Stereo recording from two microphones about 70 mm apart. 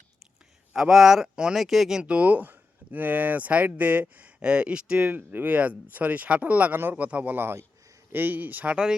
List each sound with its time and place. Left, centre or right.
0.7 s speech: centre
5.1 s speech: right